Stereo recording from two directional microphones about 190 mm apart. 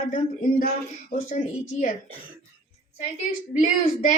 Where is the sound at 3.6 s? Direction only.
40° left (ahead or behind).